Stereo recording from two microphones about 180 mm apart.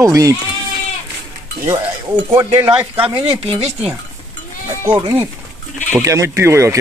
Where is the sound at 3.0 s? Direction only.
25° right (ahead or behind).